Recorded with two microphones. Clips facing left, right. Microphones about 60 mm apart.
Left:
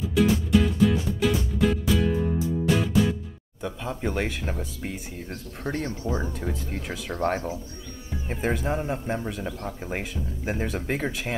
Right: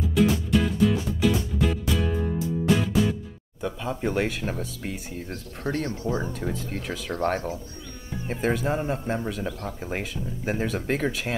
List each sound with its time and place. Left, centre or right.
0.1 s music: centre
3.6 s speech: centre
5.6 s speech: centre
6.2 s speech: centre
6.7 s speech: centre